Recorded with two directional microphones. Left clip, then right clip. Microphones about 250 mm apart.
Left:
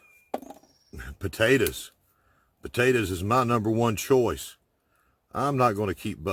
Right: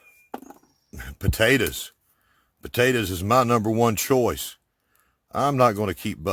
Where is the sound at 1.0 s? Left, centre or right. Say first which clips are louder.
Right 3 dB; right.